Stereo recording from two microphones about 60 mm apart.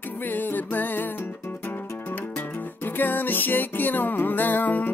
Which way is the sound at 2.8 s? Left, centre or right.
Left.